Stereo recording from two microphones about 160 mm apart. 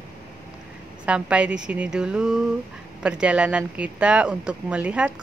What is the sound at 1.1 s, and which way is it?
Speech, 5° right (ahead or behind).